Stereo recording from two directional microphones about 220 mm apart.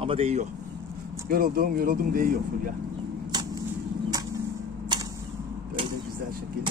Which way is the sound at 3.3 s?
20° right (ahead or behind).